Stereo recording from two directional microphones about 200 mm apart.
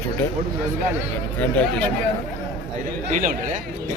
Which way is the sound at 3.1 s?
40° right (ahead or behind).